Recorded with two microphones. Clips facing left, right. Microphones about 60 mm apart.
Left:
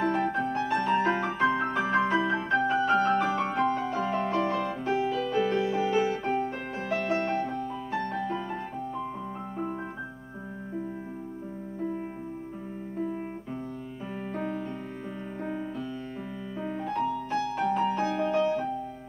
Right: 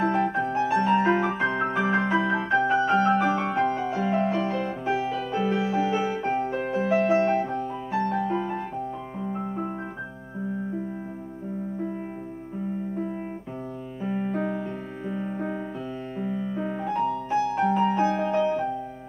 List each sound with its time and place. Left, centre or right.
0.3 s music: centre; by 8.5 s right
14.0 s keyboard: centre
16.8 s music: centre
17.6 s piano: centre
17.9 s music: centre